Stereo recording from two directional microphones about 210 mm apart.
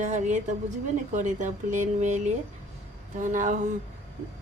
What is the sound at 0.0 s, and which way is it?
A woman's voice, 35° right (ahead or behind).